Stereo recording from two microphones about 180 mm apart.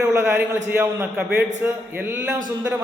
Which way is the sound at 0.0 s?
15° right (ahead or behind).